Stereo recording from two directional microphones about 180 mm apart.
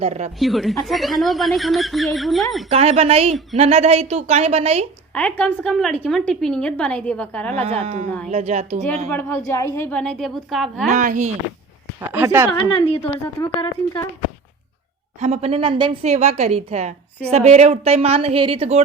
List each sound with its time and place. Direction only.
0.0 s a woman's voice: 35° right (ahead or behind)
0.3 s a woman's voice: centre (ahead or behind)
2.6 s a woman's voice: 35° right (ahead or behind)
5.1 s a woman's voice: 5° left (ahead or behind)
7.6 s a woman's voice: 35° right (ahead or behind)
9.0 s a woman's voice: 15° left (ahead or behind)
10.9 s speech: 45° right (ahead or behind)
11.9 s speech: 15° right (ahead or behind)
13.2 s speech: 20° left (ahead or behind)
15.2 s a woman's voice: 35° right (ahead or behind)